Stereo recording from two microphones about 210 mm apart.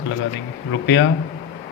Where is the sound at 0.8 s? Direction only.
60° left (ahead or behind).